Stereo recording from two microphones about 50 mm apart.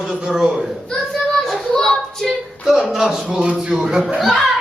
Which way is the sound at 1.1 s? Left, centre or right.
Centre.